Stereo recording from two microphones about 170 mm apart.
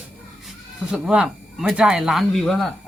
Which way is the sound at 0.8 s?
5° right (ahead or behind).